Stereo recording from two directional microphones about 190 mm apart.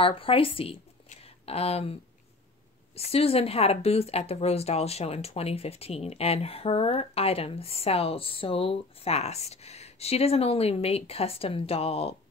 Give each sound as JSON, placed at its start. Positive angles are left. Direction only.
{"t": 0.0, "sound": "speech", "side_deg": 30}
{"t": 3.0, "sound": "speech", "side_deg": 30}